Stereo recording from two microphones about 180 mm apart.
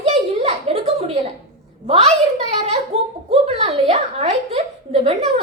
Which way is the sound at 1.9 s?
35° right (ahead or behind).